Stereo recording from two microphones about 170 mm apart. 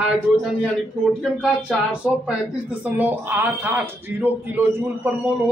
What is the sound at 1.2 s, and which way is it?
Speech, 5° right (ahead or behind).